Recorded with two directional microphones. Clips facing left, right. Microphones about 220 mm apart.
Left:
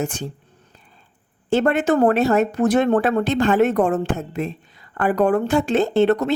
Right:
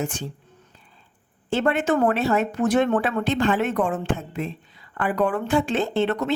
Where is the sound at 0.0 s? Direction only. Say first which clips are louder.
Left 3 dB; 40° left (ahead or behind).